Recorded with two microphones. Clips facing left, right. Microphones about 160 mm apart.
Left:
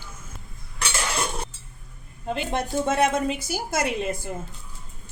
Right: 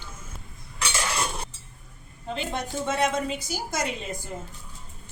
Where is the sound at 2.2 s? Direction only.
55° left (ahead or behind).